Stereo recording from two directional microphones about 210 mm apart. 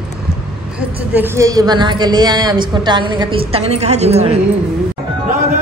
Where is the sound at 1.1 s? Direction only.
15° right (ahead or behind); by 4.4 s 30° right (ahead or behind).